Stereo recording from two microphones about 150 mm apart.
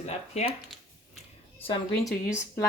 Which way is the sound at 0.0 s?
45° left (ahead or behind).